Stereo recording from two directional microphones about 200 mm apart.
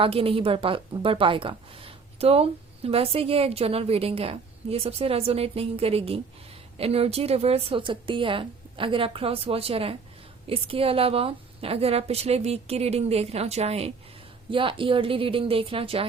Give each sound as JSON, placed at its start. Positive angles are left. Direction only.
{"t": 0.0, "sound": "a woman's voice", "side_deg": -25}